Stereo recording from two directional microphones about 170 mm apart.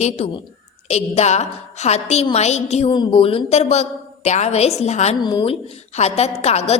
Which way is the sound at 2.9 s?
30° left (ahead or behind).